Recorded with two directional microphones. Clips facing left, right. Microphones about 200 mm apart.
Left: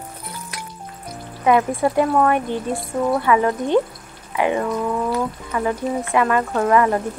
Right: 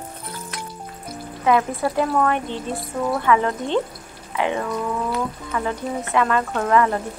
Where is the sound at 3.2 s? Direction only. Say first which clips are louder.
Left 2 dB; 10° left (ahead or behind).